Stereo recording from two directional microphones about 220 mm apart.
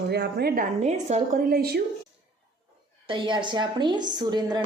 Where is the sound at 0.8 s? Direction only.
30° right (ahead or behind).